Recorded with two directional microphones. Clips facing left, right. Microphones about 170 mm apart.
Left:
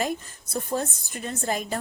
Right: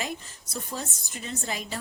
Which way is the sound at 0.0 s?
50° left (ahead or behind).